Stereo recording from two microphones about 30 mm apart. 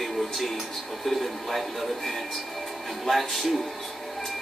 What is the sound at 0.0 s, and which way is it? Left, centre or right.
Television, centre.